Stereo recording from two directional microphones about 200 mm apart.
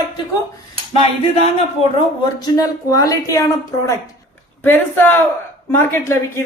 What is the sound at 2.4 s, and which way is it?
Speech, 15° left (ahead or behind).